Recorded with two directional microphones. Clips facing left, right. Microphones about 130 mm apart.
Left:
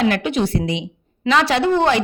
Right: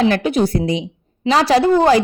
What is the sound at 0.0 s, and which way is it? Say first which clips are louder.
A woman's voice: right 3 dB; 35° right (ahead or behind).